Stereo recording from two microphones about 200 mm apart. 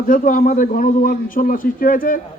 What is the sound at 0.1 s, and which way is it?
Speech, 40° left (ahead or behind).